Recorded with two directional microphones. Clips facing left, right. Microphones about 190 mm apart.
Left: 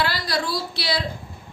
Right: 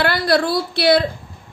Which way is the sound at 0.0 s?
60° right (ahead or behind).